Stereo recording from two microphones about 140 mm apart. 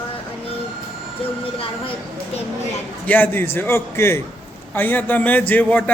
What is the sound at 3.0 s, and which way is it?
Speech, 15° left (ahead or behind).